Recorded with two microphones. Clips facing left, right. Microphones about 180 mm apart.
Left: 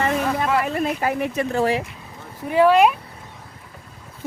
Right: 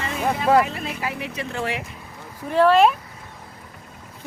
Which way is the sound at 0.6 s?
50° left (ahead or behind).